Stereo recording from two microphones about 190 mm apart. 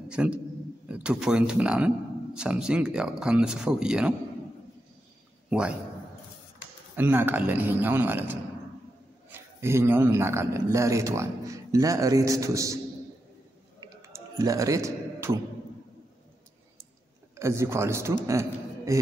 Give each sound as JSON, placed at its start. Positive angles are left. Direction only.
{"t": 0.1, "sound": "a man's voice", "side_deg": -5}
{"t": 5.5, "sound": "speech", "side_deg": -5}
{"t": 7.0, "sound": "speech", "side_deg": -10}
{"t": 13.7, "sound": "a sound", "side_deg": -20}
{"t": 17.4, "sound": "a man's voice", "side_deg": -15}